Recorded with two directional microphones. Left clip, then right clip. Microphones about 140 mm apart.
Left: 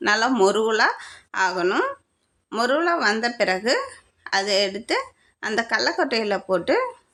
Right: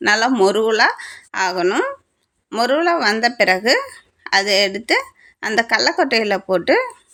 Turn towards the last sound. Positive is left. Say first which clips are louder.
# right 5 dB
turn(degrees=-30)  # may be behind; listen again after turning